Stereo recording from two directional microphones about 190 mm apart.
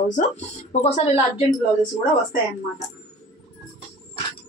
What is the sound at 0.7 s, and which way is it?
Speech, 35° left (ahead or behind).